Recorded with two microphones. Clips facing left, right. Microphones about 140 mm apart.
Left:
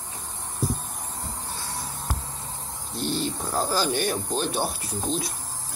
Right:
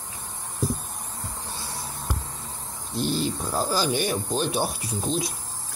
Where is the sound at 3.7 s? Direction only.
10° right (ahead or behind).